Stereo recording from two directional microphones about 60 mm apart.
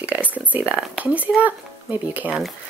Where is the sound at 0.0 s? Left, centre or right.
Right.